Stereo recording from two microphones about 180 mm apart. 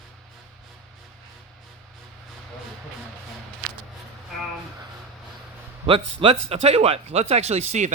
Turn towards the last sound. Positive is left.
turn(degrees=-40)  # may be behind; listen again after turning